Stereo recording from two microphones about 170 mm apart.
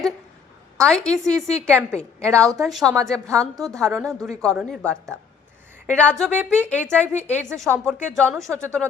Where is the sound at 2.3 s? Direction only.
20° right (ahead or behind).